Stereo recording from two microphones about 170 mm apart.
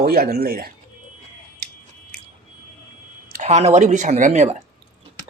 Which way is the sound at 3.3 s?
45° right (ahead or behind).